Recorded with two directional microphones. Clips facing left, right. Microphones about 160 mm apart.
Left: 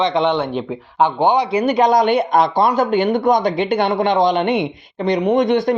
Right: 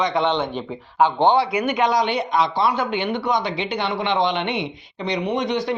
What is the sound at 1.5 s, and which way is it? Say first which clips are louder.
Speech: left 6 dB; 35° left (ahead or behind).